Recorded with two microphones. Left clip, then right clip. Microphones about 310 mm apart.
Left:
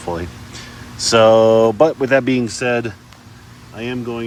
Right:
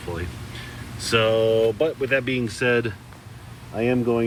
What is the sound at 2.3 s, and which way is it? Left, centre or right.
Speech, centre.